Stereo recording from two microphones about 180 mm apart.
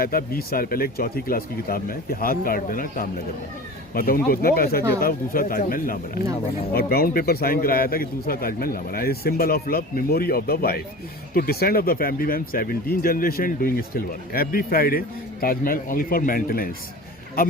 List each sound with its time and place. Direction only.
0.0 s a man's voice: 55° left (ahead or behind)